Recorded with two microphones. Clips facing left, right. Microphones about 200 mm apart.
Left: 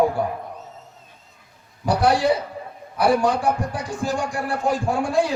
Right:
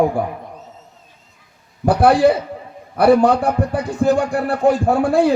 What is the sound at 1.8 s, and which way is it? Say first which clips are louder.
Speech: right 6 dB; 55° right (ahead or behind).